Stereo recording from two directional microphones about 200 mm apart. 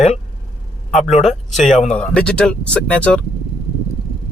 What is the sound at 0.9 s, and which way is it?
Speech, 35° left (ahead or behind).